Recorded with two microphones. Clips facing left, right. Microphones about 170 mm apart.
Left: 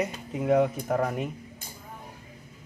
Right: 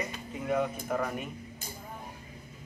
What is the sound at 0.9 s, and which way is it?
Speech, 50° left (ahead or behind).